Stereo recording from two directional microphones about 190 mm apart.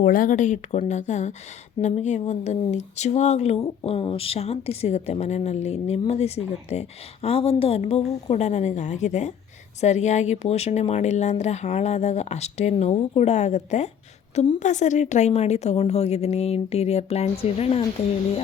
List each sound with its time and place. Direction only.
0.0 s a woman's voice: 45° left (ahead or behind)